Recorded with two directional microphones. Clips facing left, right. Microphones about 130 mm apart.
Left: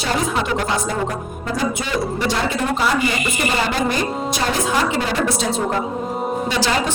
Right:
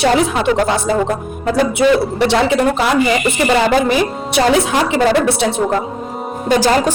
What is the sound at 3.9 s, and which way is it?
Speech, 80° right.